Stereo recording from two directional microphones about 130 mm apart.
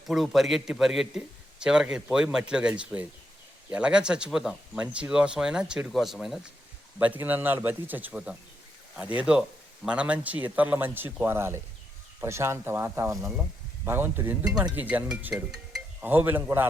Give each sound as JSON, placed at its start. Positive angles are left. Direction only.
{"t": 0.1, "sound": "a man's voice", "side_deg": 0}
{"t": 7.0, "sound": "speech", "side_deg": -15}